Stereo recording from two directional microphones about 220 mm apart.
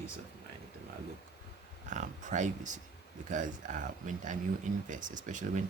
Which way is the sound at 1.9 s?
35° right (ahead or behind).